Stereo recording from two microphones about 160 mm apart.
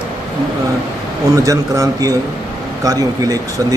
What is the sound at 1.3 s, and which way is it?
Speech, 20° right (ahead or behind).